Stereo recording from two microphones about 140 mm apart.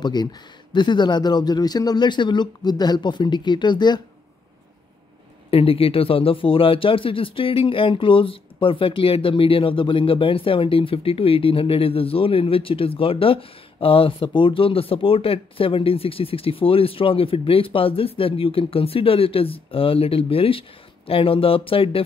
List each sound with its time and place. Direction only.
0.0 s speech: 30° left (ahead or behind)
5.5 s speech: 40° left (ahead or behind)